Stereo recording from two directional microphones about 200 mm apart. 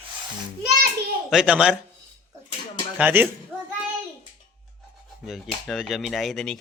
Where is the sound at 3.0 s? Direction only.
10° right (ahead or behind).